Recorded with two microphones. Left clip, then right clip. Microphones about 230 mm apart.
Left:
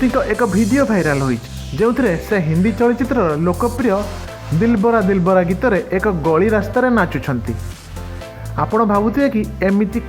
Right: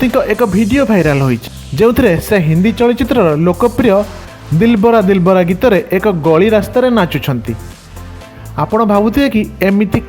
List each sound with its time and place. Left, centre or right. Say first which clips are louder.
0.0 s speech: right 4 dB; right
8.5 s speech: right 4 dB; right